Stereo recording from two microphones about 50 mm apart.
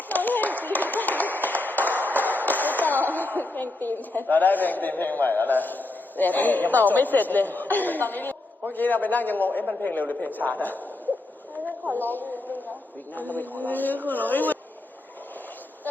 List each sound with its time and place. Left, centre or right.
0.1 s clapping: left
8.7 s a man's voice: left
11.9 s a sound: left
13.1 s a man's voice: left